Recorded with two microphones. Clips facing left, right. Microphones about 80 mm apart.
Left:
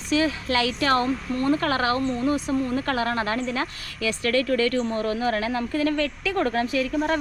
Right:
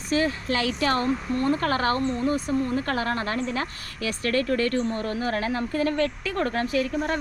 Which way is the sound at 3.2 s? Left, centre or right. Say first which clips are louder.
Left 1 dB; right.